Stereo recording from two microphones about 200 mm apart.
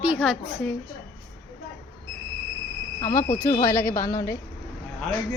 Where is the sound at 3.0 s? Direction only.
15° left (ahead or behind).